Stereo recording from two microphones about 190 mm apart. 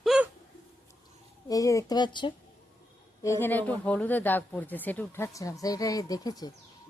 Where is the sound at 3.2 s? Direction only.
10° left (ahead or behind).